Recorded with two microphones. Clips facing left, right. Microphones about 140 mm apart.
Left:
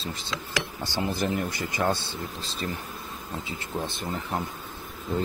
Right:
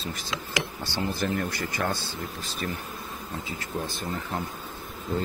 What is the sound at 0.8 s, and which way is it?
Speech, 20° left (ahead or behind).